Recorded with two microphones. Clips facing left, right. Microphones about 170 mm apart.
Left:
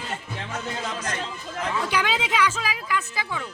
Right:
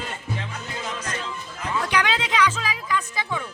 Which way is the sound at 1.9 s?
10° left (ahead or behind).